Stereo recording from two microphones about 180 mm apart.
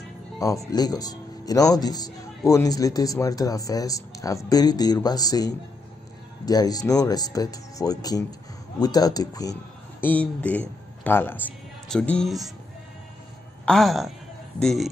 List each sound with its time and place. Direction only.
0.7 s a man's voice: 20° left (ahead or behind)
11.9 s music: 5° left (ahead or behind)
13.7 s music: centre (ahead or behind)